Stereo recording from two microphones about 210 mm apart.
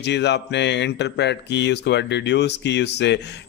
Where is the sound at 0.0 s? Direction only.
55° left (ahead or behind).